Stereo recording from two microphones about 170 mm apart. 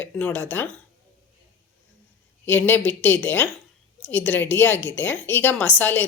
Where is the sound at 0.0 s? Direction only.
10° left (ahead or behind).